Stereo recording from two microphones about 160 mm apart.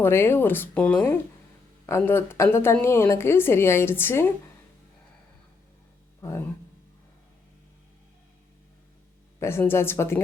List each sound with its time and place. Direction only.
0.0 s a woman's voice: 15° left (ahead or behind)
9.4 s a woman's voice: 15° left (ahead or behind)